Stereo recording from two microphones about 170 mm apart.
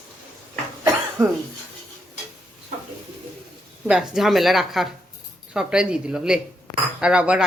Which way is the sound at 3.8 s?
5° right (ahead or behind).